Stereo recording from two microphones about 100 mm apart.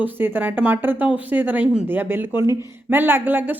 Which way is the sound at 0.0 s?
20° right (ahead or behind).